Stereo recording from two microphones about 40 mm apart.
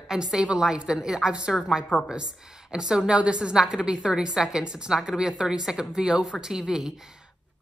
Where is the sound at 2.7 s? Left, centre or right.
Centre.